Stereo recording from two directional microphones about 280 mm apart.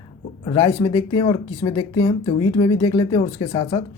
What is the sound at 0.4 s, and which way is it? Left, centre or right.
Speech, centre.